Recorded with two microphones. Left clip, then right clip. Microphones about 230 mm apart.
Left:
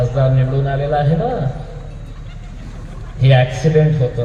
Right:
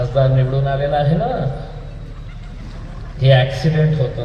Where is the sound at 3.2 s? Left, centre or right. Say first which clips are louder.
Right 1 dB; right.